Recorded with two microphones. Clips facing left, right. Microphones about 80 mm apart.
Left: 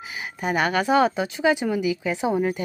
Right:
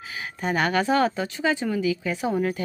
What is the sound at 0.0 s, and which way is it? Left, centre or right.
Speech, centre.